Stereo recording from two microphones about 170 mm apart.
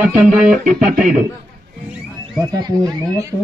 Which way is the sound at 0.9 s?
55° right (ahead or behind).